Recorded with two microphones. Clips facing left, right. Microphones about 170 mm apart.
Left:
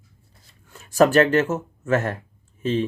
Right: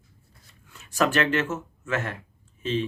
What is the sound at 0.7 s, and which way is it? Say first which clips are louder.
Speech: left 8 dB; 45° left (ahead or behind).